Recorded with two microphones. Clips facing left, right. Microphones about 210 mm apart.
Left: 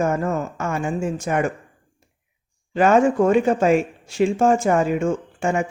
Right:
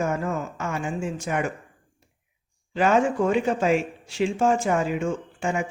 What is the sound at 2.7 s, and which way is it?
Speech, 50° left (ahead or behind).